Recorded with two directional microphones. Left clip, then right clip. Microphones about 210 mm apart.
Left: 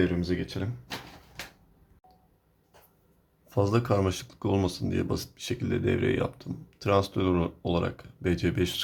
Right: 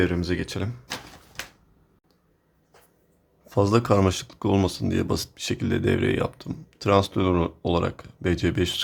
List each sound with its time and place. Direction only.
0.0 s speech: 30° right (ahead or behind)
3.4 s speech: 20° right (ahead or behind)